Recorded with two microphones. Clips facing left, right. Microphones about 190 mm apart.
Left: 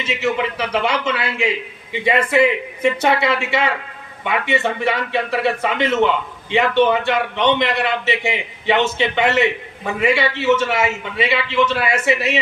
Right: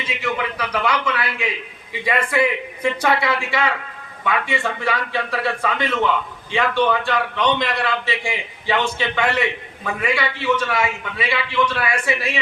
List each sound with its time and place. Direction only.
0.0 s speech: 25° left (ahead or behind)